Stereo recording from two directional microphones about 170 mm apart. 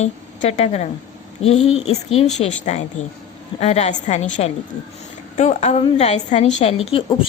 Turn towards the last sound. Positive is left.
turn(degrees=35)  # may be behind; listen again after turning